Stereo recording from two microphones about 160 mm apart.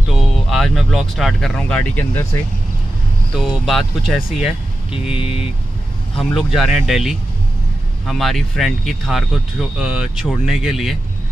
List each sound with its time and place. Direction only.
0.1 s speech: centre (ahead or behind)
3.3 s speech: centre (ahead or behind)
5.1 s speech: 35° left (ahead or behind)
6.3 s speech: centre (ahead or behind)